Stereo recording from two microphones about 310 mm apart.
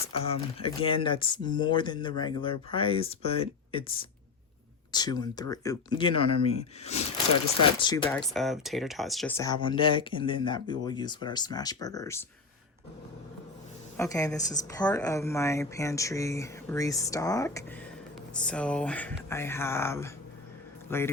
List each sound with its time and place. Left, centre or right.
0.1 s speech: centre
13.9 s speech: centre